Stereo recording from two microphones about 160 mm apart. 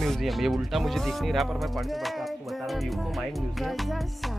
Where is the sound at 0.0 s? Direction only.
Centre (ahead or behind).